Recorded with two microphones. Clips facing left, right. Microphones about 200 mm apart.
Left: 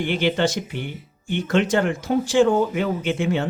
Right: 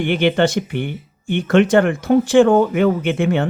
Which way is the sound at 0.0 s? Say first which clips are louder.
Right 5 dB; 60° right (ahead or behind).